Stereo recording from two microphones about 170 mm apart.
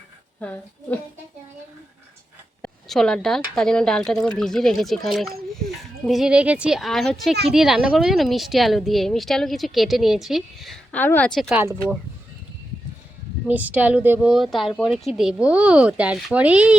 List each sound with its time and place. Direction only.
0.3 s a woman's voice: 10° left (ahead or behind)
2.6 s speech: 5° left (ahead or behind)
11.0 s a woman's voice: 10° left (ahead or behind)
11.3 s speech: centre (ahead or behind)
13.5 s speech: 10° right (ahead or behind)